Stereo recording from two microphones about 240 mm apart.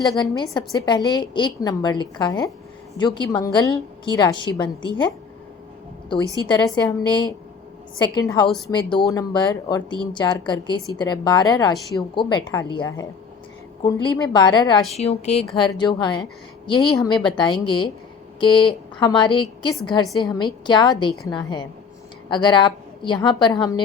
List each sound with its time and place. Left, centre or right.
0.2 s speech: centre
6.5 s speech: centre
8.4 s a woman's voice: centre
8.7 s a woman's voice: centre